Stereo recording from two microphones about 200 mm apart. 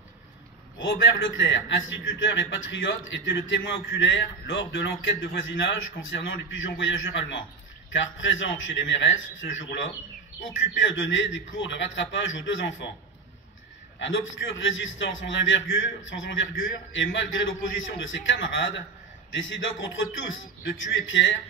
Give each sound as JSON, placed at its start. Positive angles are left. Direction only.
{"t": 0.7, "sound": "a man's voice", "side_deg": 70}
{"t": 13.9, "sound": "a man's voice", "side_deg": 65}